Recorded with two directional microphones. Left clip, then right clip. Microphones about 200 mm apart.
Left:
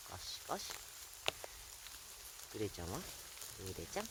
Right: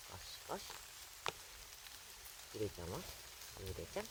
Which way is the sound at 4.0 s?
25° left (ahead or behind).